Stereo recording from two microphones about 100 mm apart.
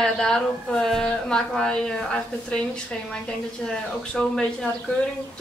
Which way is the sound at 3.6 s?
5° left (ahead or behind).